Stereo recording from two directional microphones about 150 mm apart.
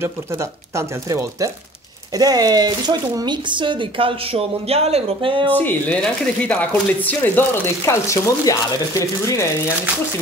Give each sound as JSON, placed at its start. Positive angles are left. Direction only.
{"t": 0.0, "sound": "speech", "side_deg": -20}
{"t": 5.5, "sound": "speech", "side_deg": 10}